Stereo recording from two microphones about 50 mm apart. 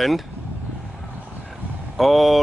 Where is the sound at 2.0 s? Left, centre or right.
Centre.